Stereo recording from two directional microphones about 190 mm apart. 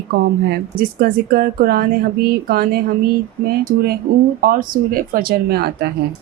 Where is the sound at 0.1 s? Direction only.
55° right (ahead or behind).